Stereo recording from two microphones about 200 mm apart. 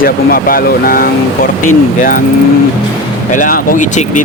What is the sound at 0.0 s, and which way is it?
Speech, 45° left (ahead or behind).